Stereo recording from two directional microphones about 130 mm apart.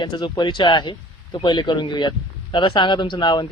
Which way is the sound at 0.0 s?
35° left (ahead or behind).